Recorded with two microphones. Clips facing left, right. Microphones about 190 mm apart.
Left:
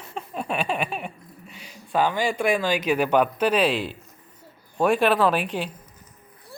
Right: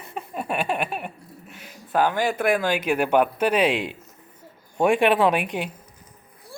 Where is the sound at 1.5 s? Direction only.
55° right (ahead or behind).